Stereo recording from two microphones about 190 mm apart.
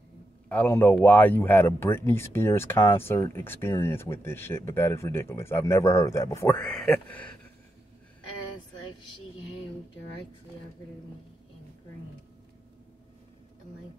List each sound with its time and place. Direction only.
0.5 s speech: 10° left (ahead or behind)